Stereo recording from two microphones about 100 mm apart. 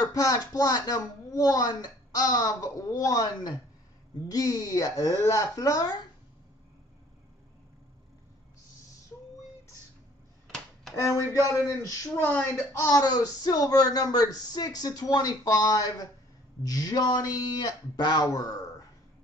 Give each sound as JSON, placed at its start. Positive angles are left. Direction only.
{"t": 0.0, "sound": "a sound", "side_deg": 40}
{"t": 0.5, "sound": "speech", "side_deg": 40}
{"t": 4.3, "sound": "speech", "side_deg": 40}
{"t": 10.5, "sound": "a sound", "side_deg": 5}
{"t": 11.0, "sound": "speech", "side_deg": 30}
{"t": 12.1, "sound": "speech", "side_deg": 15}
{"t": 12.9, "sound": "speech", "side_deg": 40}